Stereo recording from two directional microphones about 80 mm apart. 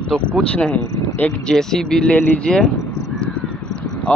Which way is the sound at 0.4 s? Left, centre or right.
Centre.